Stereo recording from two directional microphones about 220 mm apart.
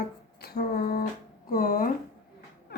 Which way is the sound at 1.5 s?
40° left (ahead or behind).